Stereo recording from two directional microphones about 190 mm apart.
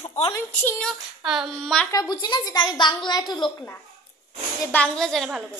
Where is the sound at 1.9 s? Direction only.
20° left (ahead or behind).